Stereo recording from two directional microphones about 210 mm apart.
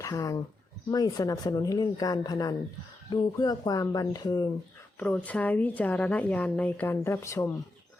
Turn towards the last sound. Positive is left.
turn(degrees=15)  # may be behind; listen again after turning